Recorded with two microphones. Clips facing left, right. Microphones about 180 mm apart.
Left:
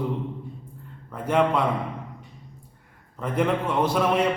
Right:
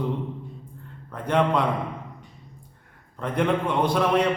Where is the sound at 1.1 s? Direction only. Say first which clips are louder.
Even; 5° left (ahead or behind).